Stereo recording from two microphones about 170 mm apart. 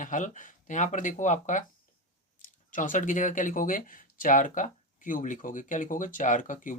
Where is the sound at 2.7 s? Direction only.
50° left (ahead or behind).